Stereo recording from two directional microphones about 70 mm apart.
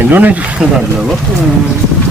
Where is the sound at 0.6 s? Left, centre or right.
Centre.